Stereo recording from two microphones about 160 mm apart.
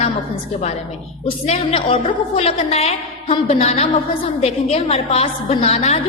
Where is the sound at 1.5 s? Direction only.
35° left (ahead or behind).